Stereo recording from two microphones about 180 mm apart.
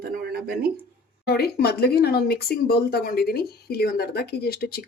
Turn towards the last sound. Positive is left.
turn(degrees=60)  # may be behind; listen again after turning